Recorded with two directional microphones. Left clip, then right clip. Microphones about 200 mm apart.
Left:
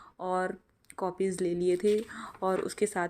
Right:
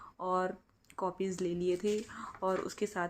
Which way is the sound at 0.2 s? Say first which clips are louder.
Left 2 dB; 15° left (ahead or behind).